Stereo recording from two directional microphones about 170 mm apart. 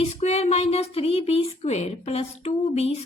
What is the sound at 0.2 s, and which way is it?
A woman's voice, 40° left (ahead or behind).